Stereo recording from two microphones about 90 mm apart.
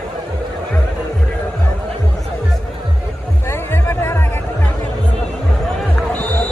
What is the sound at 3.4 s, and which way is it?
Music, 25° left (ahead or behind).